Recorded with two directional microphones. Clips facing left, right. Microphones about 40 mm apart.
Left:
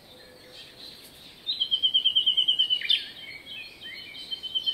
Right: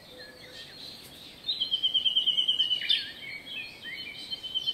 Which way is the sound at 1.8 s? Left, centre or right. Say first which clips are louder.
Left 3 dB; left.